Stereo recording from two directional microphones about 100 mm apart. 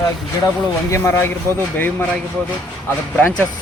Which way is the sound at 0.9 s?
25° left (ahead or behind).